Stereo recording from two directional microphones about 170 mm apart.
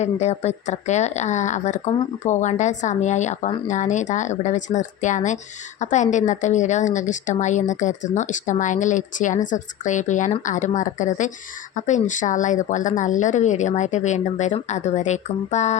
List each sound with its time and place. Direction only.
0.0 s speech: 40° left (ahead or behind)